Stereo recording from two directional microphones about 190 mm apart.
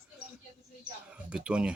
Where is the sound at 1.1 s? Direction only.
5° right (ahead or behind).